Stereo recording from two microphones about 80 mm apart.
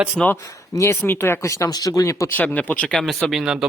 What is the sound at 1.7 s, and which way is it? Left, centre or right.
Speech, left.